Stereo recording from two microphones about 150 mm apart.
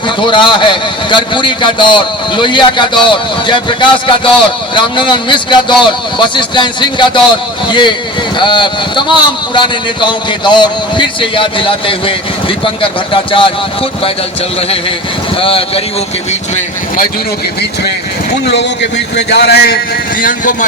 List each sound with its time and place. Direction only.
0.2 s a man's voice: 35° left (ahead or behind)
15.4 s a man's voice: 40° left (ahead or behind)
19.4 s a man's voice: 90° left
20.2 s speech: 60° left (ahead or behind)